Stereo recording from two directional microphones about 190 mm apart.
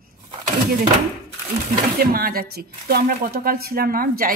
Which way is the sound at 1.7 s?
50° right (ahead or behind).